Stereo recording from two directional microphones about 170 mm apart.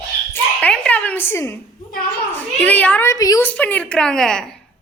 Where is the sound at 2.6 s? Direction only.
10° left (ahead or behind).